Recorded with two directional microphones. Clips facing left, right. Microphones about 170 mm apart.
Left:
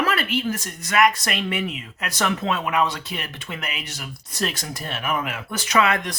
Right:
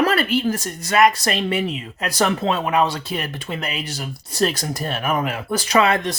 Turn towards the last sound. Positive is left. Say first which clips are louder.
# right 3 dB
turn(degrees=-30)  # may be behind; listen again after turning